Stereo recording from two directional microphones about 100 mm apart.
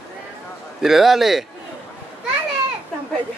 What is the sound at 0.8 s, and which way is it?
Speech, 5° right (ahead or behind).